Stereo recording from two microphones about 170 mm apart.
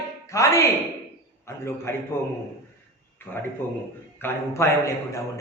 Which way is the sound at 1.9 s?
15° left (ahead or behind).